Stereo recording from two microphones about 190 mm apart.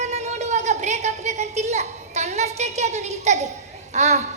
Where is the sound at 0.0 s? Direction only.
35° right (ahead or behind).